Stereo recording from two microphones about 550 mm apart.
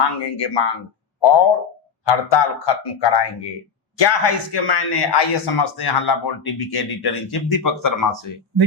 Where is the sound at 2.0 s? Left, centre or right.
Left.